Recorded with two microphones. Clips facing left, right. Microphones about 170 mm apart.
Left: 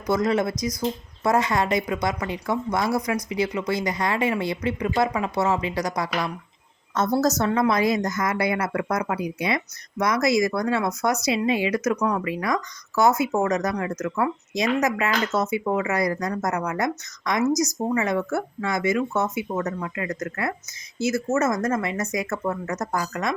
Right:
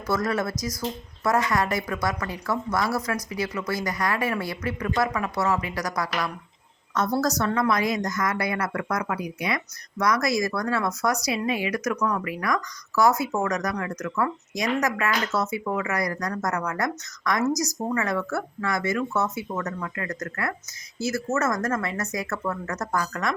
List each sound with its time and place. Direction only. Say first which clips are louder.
0.1 s speech: left 4 dB; 20° left (ahead or behind)